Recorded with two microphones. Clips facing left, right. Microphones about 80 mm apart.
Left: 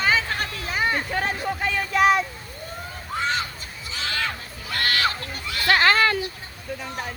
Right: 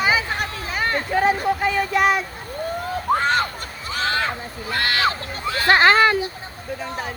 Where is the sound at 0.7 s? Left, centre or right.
Centre.